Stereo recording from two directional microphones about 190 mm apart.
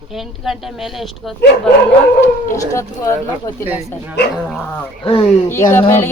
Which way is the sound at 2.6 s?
15° left (ahead or behind).